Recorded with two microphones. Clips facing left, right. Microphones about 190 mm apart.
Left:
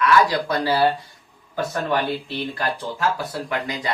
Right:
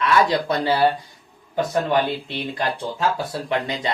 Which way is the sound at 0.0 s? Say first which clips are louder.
Left 1 dB; 25° right (ahead or behind).